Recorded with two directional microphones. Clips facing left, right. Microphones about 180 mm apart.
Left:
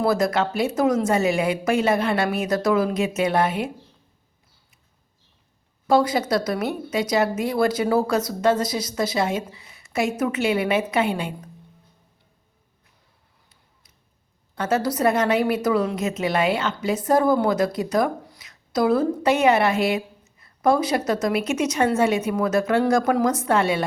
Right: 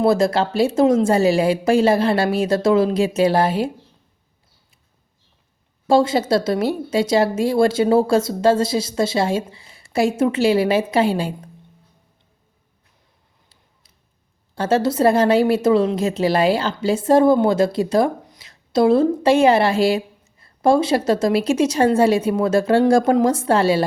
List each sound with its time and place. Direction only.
0.0 s speech: 25° right (ahead or behind)
5.9 s a woman's voice: 25° right (ahead or behind)
14.5 s a woman's voice: 30° right (ahead or behind)